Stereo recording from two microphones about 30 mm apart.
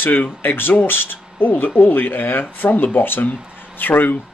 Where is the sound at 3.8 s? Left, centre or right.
Left.